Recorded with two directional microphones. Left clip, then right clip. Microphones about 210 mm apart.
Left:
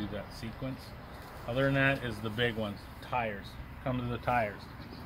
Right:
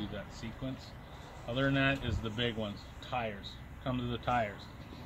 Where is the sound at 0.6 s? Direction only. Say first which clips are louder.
Left 2 dB; 10° left (ahead or behind).